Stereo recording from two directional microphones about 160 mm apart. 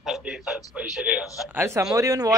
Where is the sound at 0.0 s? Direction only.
Centre (ahead or behind).